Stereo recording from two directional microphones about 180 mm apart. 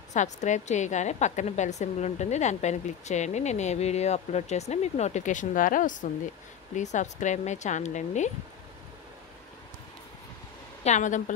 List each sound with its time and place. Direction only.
0.1 s a woman's voice: 40° left (ahead or behind)
10.8 s a woman's voice: 40° left (ahead or behind)